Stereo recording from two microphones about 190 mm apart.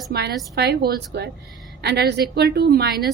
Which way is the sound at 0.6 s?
55° right (ahead or behind).